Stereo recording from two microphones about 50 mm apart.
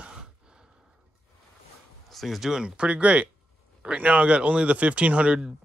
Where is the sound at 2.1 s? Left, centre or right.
Centre.